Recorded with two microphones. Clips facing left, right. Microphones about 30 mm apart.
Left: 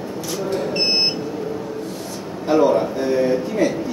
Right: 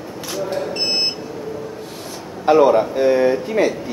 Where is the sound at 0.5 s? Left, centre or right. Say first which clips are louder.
Left 3 dB; centre.